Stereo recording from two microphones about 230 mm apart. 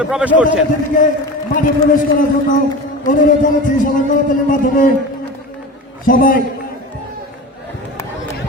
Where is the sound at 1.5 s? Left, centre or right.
Left.